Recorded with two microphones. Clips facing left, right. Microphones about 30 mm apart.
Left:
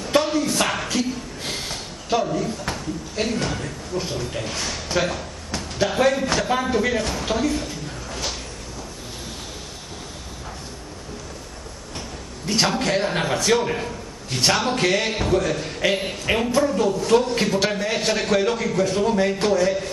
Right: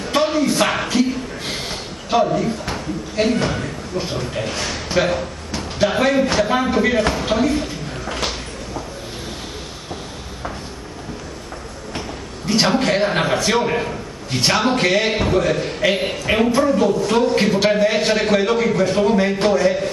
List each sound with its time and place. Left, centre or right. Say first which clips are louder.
0.2 s a sound: right 4 dB; right
2.7 s a man's voice: right 4 dB; right
12.4 s a man's voice: right 4 dB; right